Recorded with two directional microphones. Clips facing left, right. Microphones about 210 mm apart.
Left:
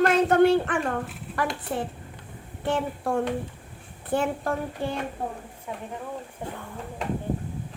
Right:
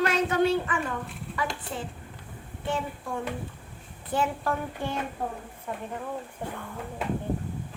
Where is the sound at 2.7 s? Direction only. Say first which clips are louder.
Left 5 dB; 65° left (ahead or behind).